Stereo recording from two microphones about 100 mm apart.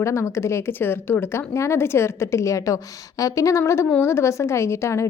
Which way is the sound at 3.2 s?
35° left (ahead or behind).